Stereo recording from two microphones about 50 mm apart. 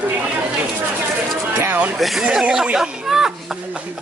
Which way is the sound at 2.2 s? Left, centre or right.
Centre.